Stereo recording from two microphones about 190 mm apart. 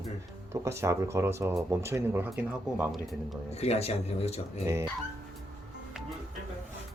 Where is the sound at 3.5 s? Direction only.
35° left (ahead or behind).